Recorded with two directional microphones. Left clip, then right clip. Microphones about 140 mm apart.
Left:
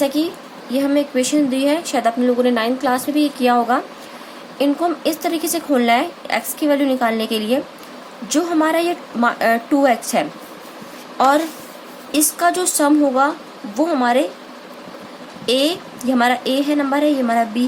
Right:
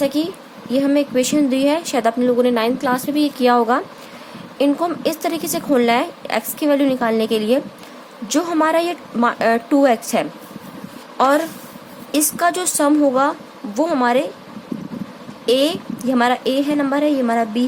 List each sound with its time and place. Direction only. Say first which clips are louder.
0.0 s speech: left 1 dB; 40° right (ahead or behind)
15.4 s speech: right 1 dB; 30° right (ahead or behind)